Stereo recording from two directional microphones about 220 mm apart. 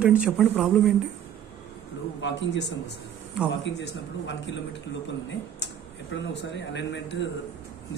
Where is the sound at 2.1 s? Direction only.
55° left (ahead or behind).